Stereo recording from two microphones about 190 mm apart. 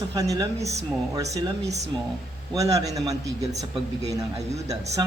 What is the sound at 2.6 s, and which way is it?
A man's voice, 15° right (ahead or behind).